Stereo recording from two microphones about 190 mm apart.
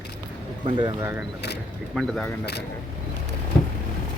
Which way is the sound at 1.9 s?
Centre (ahead or behind).